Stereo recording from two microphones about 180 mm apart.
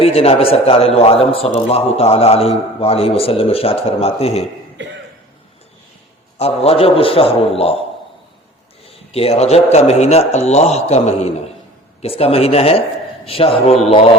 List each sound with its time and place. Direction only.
0.0 s a man's voice: 35° left (ahead or behind)
6.3 s a man's voice: 35° left (ahead or behind)
8.9 s a man's voice: 35° left (ahead or behind)